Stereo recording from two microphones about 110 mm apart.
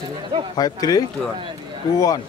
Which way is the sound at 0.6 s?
35° left (ahead or behind).